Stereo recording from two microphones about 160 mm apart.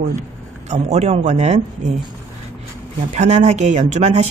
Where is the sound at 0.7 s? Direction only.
45° right (ahead or behind).